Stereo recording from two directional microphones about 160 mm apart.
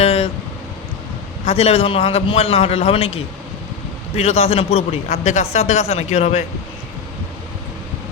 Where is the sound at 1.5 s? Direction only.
40° left (ahead or behind).